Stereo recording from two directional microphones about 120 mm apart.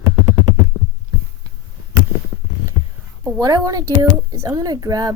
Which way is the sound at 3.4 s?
35° right (ahead or behind).